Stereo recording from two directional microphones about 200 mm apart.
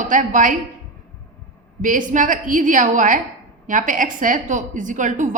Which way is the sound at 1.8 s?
40° right (ahead or behind).